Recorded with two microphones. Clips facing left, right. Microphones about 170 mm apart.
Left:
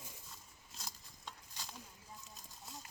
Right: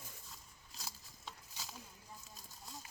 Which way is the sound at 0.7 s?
5° right (ahead or behind).